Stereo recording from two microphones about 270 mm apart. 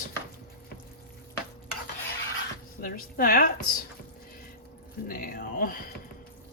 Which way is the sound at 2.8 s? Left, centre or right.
Left.